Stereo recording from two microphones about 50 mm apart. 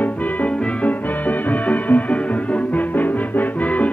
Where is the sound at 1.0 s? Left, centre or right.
Left.